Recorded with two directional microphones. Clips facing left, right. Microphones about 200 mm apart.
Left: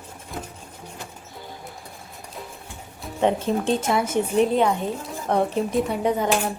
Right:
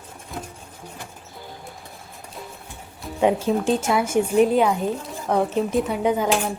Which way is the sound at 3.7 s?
5° right (ahead or behind).